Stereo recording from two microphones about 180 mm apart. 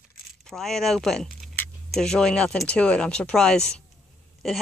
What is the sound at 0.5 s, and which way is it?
Speech, centre (ahead or behind).